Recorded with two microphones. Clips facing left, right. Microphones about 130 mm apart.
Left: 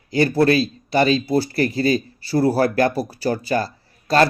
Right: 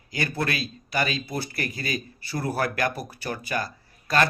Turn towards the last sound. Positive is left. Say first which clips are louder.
# left 7 dB
turn(degrees=30)  # may be behind; listen again after turning